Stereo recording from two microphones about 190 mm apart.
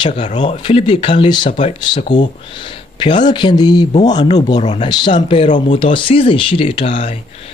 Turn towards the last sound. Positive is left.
turn(degrees=30)  # may be behind; listen again after turning